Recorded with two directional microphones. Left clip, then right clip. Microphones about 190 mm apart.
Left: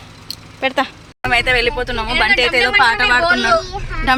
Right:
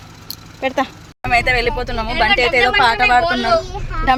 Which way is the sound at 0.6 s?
Centre (ahead or behind).